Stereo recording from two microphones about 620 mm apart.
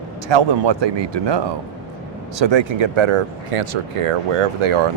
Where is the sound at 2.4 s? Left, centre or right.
Right.